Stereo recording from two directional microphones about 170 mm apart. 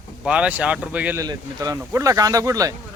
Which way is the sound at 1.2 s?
20° right (ahead or behind).